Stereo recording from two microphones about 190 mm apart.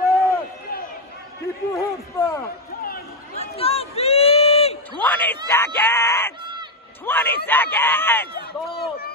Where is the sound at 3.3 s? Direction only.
30° left (ahead or behind).